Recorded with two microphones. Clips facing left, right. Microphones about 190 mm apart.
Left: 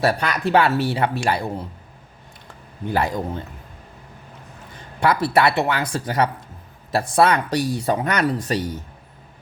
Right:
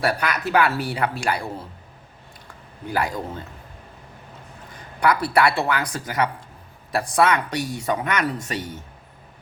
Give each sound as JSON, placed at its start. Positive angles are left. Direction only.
{"t": 0.0, "sound": "speech", "side_deg": 25}
{"t": 2.9, "sound": "speech", "side_deg": 25}
{"t": 4.9, "sound": "speech", "side_deg": 25}